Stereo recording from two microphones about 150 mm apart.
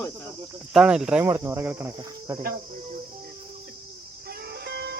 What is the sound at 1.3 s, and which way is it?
Speech, 15° right (ahead or behind).